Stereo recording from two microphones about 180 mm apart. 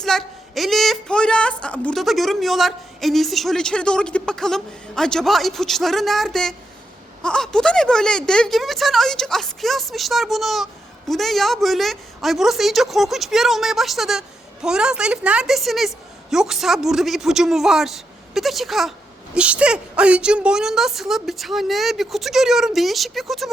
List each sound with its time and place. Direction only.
0.0 s speech: centre (ahead or behind)